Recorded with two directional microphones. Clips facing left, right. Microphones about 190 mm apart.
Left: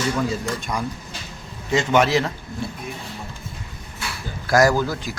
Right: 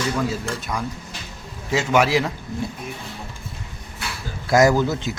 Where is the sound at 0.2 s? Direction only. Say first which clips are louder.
Left 1 dB; 5° right (ahead or behind).